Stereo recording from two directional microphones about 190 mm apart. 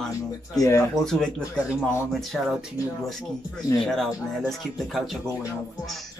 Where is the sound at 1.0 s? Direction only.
5° left (ahead or behind).